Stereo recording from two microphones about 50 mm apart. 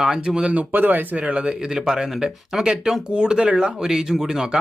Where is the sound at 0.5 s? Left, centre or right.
Right.